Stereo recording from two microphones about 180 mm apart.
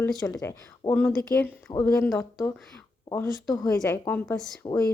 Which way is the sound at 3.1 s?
20° left (ahead or behind).